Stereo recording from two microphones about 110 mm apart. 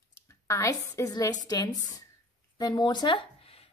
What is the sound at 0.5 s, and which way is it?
A woman's voice, 30° left (ahead or behind).